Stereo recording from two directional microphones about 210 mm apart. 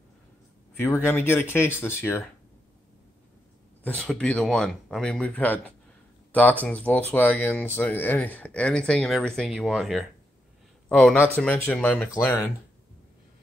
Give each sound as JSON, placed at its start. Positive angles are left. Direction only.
{"t": 0.7, "sound": "speech", "side_deg": 10}
{"t": 3.8, "sound": "speech", "side_deg": 5}
{"t": 6.6, "sound": "speech", "side_deg": 5}